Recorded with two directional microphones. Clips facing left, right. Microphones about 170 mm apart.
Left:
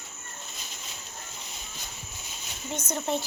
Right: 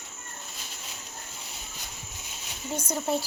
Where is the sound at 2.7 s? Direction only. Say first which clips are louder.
Right 1 dB; 10° right (ahead or behind).